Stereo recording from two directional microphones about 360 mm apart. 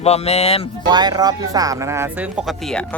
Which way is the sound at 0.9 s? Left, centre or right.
Centre.